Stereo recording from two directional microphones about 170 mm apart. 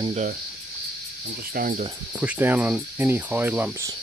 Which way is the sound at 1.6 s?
60° right (ahead or behind).